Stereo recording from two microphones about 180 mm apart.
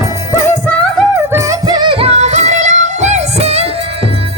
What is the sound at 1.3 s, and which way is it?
Music, 20° right (ahead or behind).